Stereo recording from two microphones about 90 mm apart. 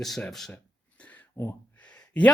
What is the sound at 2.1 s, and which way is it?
Speech, 15° left (ahead or behind).